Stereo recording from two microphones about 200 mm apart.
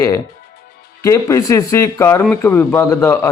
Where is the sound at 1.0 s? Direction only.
15° left (ahead or behind).